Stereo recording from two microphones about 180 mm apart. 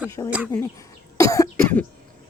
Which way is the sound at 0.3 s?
5° right (ahead or behind).